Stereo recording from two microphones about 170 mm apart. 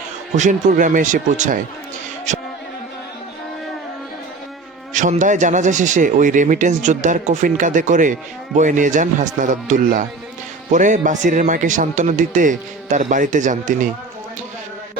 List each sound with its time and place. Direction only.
0.3 s speech: 45° right (ahead or behind)
2.3 s music: 45° right (ahead or behind)
4.9 s speech: 45° right (ahead or behind)